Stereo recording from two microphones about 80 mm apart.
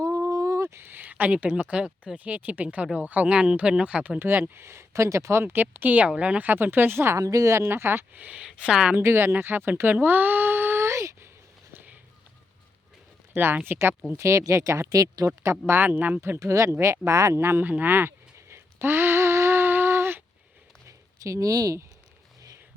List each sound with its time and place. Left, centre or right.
0.0 s speech: right
7.2 s speech: right
8.4 s speech: centre
9.0 s speech: right
11.7 s run: right
13.3 s speech: right
14.2 s speech: right
15.4 s speech: right
17.7 s a sound: right
20.8 s a sound: right